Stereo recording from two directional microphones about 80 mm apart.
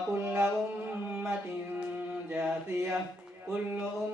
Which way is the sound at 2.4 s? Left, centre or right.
Right.